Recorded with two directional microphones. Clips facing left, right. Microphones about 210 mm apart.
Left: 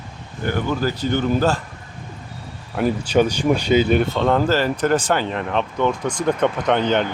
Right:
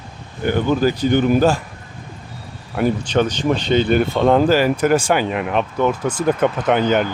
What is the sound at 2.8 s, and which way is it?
Speech, 5° left (ahead or behind).